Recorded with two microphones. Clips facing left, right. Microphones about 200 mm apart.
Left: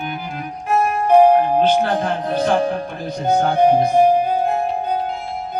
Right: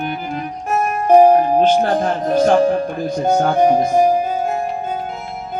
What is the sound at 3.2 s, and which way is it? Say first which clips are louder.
Music: even; 45° right (ahead or behind).